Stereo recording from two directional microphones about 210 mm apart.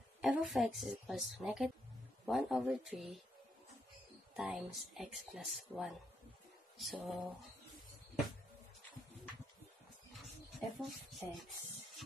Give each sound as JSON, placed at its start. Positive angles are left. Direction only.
{"t": 0.2, "sound": "speech", "side_deg": -5}
{"t": 4.4, "sound": "speech", "side_deg": 0}
{"t": 10.8, "sound": "speech", "side_deg": 0}